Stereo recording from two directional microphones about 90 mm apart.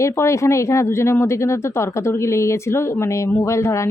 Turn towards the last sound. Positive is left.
turn(degrees=35)  # may be behind; listen again after turning